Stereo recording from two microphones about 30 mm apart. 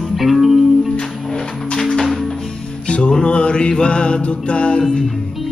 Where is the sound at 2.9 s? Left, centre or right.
Left.